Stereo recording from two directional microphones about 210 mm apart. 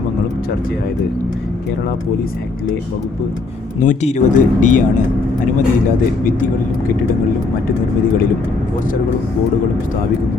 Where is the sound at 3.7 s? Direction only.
35° left (ahead or behind).